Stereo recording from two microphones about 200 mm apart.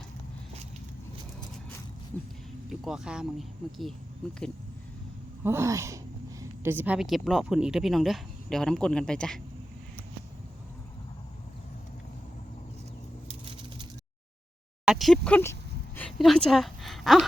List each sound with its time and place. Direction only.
2.6 s speech: centre (ahead or behind)
5.4 s speech: 10° right (ahead or behind); by 9.4 s 5° left (ahead or behind)
13.2 s a sound: 25° right (ahead or behind)
14.8 s a woman's voice: centre (ahead or behind)